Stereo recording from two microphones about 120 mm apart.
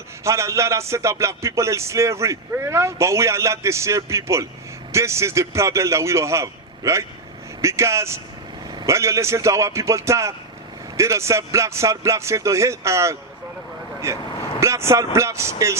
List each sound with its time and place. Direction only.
0.3 s speech: 25° right (ahead or behind)